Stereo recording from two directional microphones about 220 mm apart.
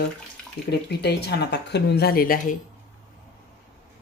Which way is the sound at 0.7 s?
50° left (ahead or behind).